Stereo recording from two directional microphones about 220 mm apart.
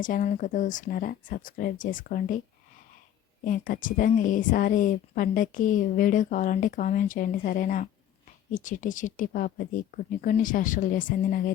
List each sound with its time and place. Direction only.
0.0 s speech: 35° left (ahead or behind)
3.4 s speech: 40° left (ahead or behind)